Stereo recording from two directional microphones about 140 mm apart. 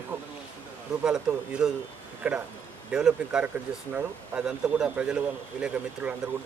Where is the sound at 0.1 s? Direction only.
15° right (ahead or behind).